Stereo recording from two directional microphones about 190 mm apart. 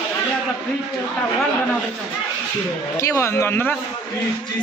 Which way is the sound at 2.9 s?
15° left (ahead or behind).